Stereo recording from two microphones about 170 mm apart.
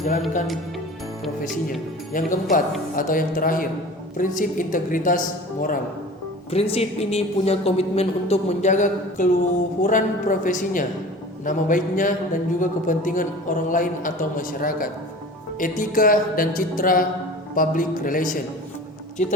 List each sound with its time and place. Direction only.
2.1 s a man's voice: 50° left (ahead or behind)
6.5 s a woman's voice: 35° left (ahead or behind)